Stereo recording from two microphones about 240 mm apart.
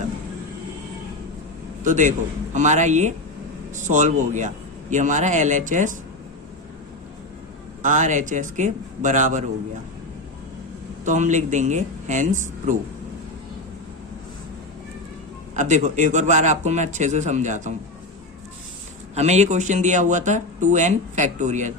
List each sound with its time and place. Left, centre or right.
1.8 s a man's voice: right
7.8 s a man's voice: right
11.0 s speech: right
15.5 s speech: right
19.1 s speech: right